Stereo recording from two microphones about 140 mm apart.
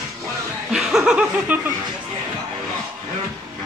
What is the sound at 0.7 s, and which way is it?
Chuckle, 5° right (ahead or behind).